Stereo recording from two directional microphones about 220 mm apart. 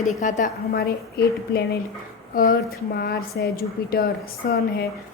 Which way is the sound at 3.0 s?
45° left (ahead or behind).